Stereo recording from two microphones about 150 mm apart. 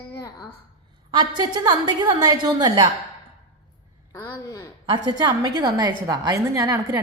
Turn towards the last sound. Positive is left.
turn(degrees=-25)  # may be behind; listen again after turning